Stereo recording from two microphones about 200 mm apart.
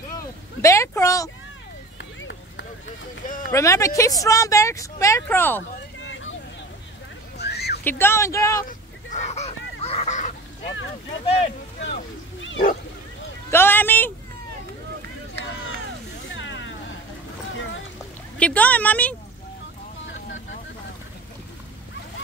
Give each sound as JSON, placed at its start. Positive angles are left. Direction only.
{"t": 0.6, "sound": "a sound", "side_deg": 15}
{"t": 2.0, "sound": "run", "side_deg": 60}
{"t": 3.5, "sound": "a woman's voice", "side_deg": 15}
{"t": 5.9, "sound": "vehicle", "side_deg": 70}
{"t": 7.3, "sound": "a sound", "side_deg": 55}
{"t": 7.8, "sound": "a woman's voice", "side_deg": 10}
{"t": 8.6, "sound": "goose", "side_deg": 35}
{"t": 11.8, "sound": "a sound", "side_deg": 65}
{"t": 13.5, "sound": "a woman's voice", "side_deg": 10}
{"t": 16.3, "sound": "vehicle", "side_deg": 70}
{"t": 18.4, "sound": "a woman's voice", "side_deg": 5}